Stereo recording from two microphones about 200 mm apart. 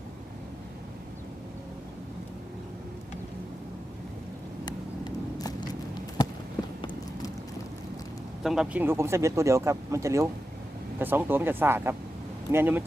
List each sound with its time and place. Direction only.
4.6 s vehicle: 20° left (ahead or behind)
8.4 s speech: 5° right (ahead or behind)